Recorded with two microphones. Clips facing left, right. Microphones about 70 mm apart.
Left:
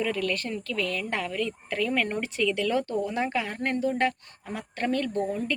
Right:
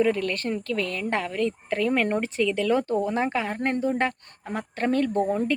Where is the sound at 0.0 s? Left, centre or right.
Right.